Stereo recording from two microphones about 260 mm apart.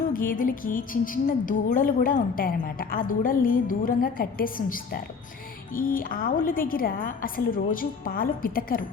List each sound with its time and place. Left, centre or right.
0.1 s music: left